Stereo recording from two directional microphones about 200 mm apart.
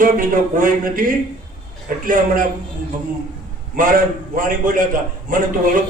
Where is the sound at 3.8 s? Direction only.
45° right (ahead or behind).